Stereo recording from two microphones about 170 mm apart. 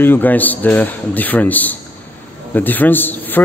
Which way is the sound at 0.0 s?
10° left (ahead or behind).